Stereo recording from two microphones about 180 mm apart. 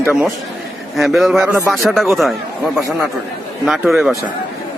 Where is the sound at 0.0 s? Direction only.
10° right (ahead or behind).